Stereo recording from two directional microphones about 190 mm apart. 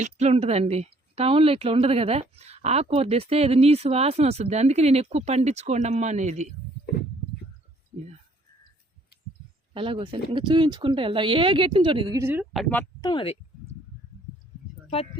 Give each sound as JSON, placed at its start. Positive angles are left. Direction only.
{"t": 0.0, "sound": "speech", "side_deg": -35}
{"t": 9.7, "sound": "speech", "side_deg": -25}
{"t": 12.5, "sound": "speech", "side_deg": 5}
{"t": 13.0, "sound": "a sound", "side_deg": 25}
{"t": 14.8, "sound": "speech", "side_deg": 30}